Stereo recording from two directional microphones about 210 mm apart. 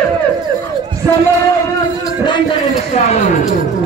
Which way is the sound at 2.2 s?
20° left (ahead or behind).